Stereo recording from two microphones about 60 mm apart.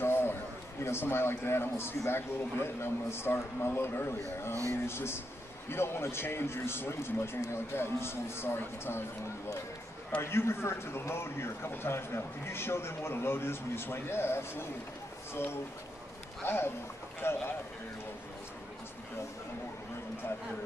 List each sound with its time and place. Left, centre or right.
0.0 s a sound: left
0.8 s a man's voice: left
10.2 s a man's voice: left
16.4 s a man's voice: left